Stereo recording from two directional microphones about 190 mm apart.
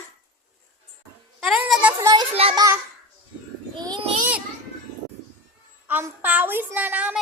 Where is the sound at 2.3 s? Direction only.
30° right (ahead or behind).